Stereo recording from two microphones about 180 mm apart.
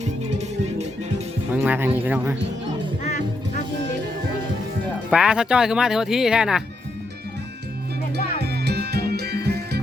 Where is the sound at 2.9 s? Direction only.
40° left (ahead or behind).